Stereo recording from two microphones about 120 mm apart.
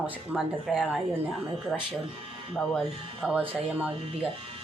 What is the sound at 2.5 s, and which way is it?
Speech, centre (ahead or behind).